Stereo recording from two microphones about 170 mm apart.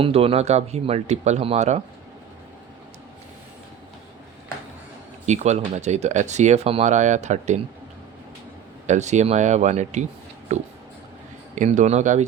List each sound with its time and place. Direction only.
0.0 s speech: 35° right (ahead or behind)
5.2 s speech: 40° right (ahead or behind)
8.9 s speech: 45° right (ahead or behind)